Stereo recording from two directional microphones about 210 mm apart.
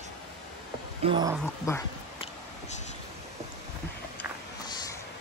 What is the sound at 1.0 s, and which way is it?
Speech, 20° right (ahead or behind).